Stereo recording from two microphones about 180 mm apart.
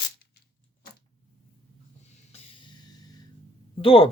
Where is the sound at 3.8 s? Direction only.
30° left (ahead or behind).